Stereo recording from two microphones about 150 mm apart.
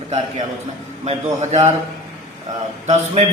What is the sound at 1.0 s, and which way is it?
Speech, 45° right (ahead or behind).